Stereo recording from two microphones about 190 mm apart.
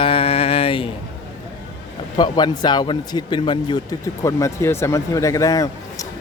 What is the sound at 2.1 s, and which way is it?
A man's voice, 20° left (ahead or behind).